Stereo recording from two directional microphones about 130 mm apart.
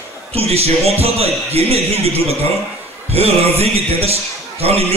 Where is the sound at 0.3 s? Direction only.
50° right (ahead or behind).